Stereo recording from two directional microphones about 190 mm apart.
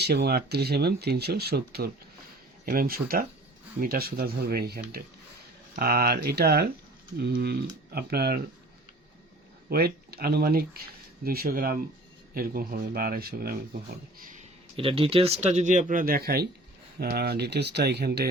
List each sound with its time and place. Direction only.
0.0 s speech: 60° right (ahead or behind)
9.6 s speech: 55° right (ahead or behind)
14.8 s speech: 30° right (ahead or behind); by 18.3 s 55° right (ahead or behind)